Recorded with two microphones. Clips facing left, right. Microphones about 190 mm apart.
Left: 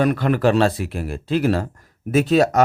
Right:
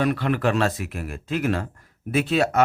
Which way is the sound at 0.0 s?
45° left (ahead or behind).